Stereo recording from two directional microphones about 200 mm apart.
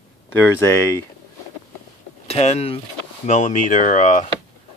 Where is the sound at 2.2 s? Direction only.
30° left (ahead or behind).